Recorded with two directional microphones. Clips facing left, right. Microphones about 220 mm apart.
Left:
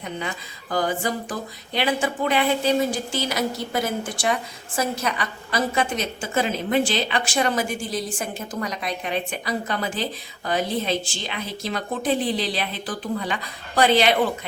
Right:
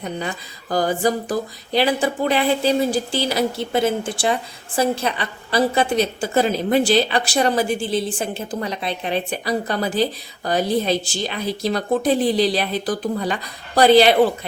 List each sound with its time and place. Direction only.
0.2 s speech: 35° right (ahead or behind)